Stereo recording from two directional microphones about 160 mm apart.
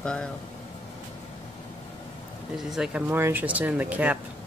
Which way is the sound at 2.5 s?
5° right (ahead or behind).